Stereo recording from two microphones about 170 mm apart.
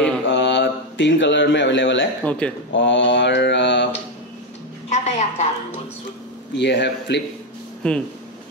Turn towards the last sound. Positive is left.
turn(degrees=5)  # may be behind; listen again after turning